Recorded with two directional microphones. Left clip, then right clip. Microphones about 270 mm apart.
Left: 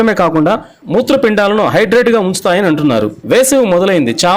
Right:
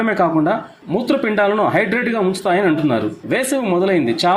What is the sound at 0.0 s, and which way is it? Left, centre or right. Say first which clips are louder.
A man's voice: left 5 dB; left.